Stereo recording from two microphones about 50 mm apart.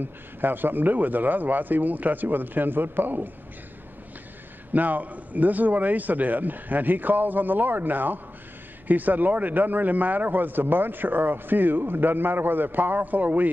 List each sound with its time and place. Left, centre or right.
0.0 s speech: right
4.7 s speech: right